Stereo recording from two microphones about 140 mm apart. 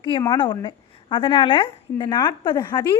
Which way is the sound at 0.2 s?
35° left (ahead or behind).